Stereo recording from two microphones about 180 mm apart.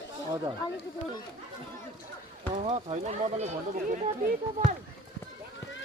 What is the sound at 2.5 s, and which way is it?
Speech, 40° right (ahead or behind).